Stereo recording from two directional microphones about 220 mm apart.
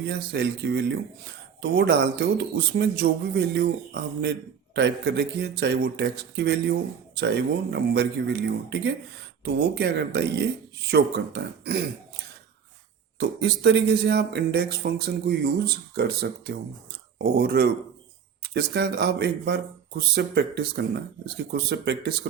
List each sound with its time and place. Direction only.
0.1 s speech: 50° right (ahead or behind)
9.4 s speech: 50° right (ahead or behind)
13.1 s speech: 50° right (ahead or behind)